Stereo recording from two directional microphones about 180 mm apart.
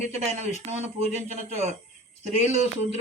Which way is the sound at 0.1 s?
35° right (ahead or behind).